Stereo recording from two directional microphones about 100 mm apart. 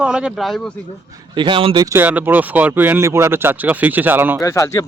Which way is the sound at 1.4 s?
60° right (ahead or behind).